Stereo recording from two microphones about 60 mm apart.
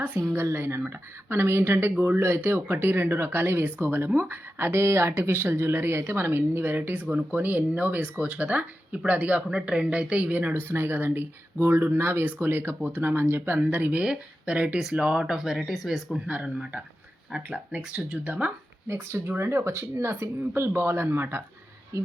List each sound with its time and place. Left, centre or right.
0.3 s speech: right
10.5 s speech: right
14.0 s speech: centre
16.1 s speech: centre
18.9 s speech: right